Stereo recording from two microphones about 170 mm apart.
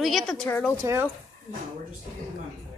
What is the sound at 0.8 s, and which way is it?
Speech, 15° right (ahead or behind).